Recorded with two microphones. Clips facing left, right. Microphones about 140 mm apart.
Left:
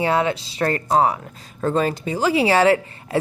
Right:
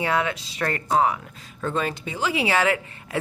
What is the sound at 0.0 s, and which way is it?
Speech, 30° left (ahead or behind).